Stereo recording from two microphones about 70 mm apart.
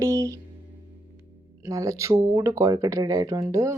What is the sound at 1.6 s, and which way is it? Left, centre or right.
Speech, right.